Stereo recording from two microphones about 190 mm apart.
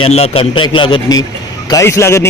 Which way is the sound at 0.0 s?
30° left (ahead or behind).